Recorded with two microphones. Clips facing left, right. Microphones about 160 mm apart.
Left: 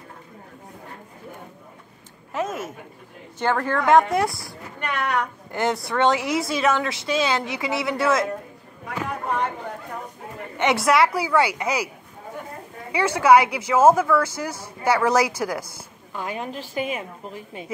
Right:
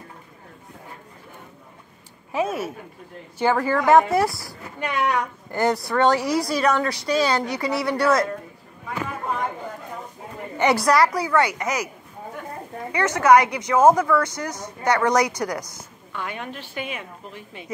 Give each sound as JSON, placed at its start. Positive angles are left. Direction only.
{"t": 2.3, "sound": "a woman's voice", "side_deg": -10}
{"t": 4.8, "sound": "a woman's voice", "side_deg": 60}
{"t": 5.1, "sound": "a woman's voice", "side_deg": 0}
{"t": 10.6, "sound": "speech", "side_deg": 0}
{"t": 12.9, "sound": "speech", "side_deg": 10}
{"t": 16.1, "sound": "a woman's voice", "side_deg": 35}